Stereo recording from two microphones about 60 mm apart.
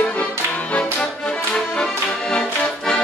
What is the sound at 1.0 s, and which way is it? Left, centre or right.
Music, centre.